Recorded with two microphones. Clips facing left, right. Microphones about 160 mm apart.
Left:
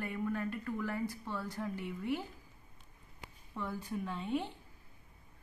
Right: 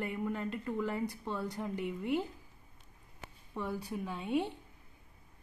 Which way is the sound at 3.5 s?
15° right (ahead or behind).